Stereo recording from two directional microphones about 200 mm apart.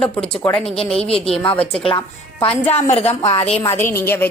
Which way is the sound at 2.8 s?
30° left (ahead or behind).